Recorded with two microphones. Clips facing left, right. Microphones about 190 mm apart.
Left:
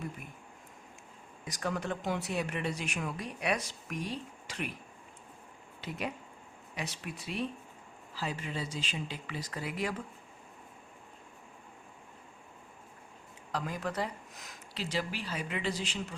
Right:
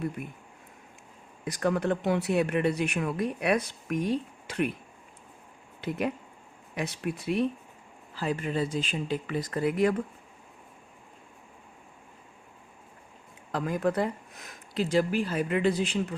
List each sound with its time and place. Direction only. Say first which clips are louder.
1.5 s speech: right 8 dB; 60° right (ahead or behind)
6.7 s speech: right 8 dB; 55° right (ahead or behind)
13.5 s speech: right 8 dB; 50° right (ahead or behind)